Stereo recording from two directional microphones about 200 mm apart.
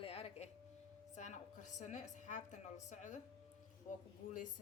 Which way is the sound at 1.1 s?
35° left (ahead or behind).